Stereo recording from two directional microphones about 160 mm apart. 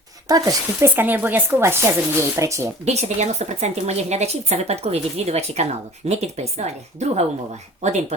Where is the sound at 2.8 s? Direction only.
45° right (ahead or behind).